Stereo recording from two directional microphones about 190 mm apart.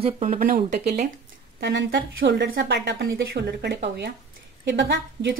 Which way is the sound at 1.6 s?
70° right (ahead or behind).